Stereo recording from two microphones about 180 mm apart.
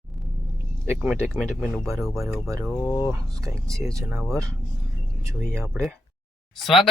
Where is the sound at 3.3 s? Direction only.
20° right (ahead or behind).